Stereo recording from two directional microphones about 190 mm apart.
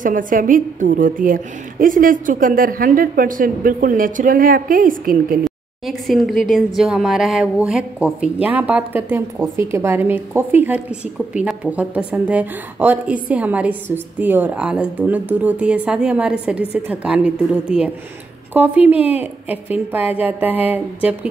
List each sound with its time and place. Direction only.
0.0 s a woman's voice: 45° right (ahead or behind)
5.4 s a woman's voice: centre (ahead or behind)